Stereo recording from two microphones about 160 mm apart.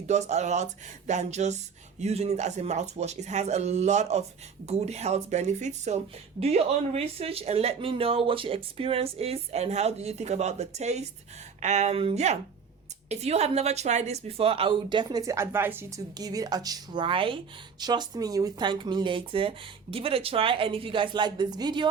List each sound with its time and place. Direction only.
0.1 s speech: 45° right (ahead or behind); by 21.8 s 25° right (ahead or behind)